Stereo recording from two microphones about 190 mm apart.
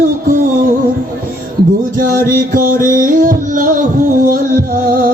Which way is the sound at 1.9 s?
50° right (ahead or behind).